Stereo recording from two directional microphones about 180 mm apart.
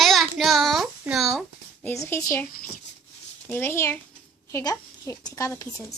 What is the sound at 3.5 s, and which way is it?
A woman's voice, 10° left (ahead or behind).